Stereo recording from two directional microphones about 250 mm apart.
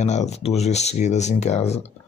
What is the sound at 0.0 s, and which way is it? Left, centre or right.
Speech, left.